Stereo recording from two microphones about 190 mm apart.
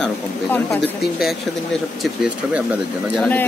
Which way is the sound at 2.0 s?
5° right (ahead or behind).